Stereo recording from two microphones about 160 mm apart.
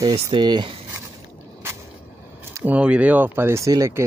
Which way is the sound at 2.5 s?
10° right (ahead or behind).